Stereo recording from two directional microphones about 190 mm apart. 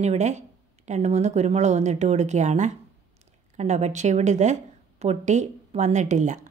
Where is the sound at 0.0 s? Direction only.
35° right (ahead or behind).